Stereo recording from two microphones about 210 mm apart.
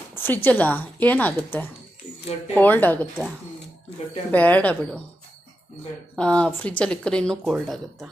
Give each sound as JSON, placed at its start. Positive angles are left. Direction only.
{"t": 0.2, "sound": "speech", "side_deg": 10}
{"t": 4.3, "sound": "speech", "side_deg": 5}
{"t": 6.1, "sound": "speech", "side_deg": 5}